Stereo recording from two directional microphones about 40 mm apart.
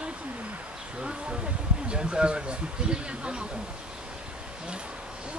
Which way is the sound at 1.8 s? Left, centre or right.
Right.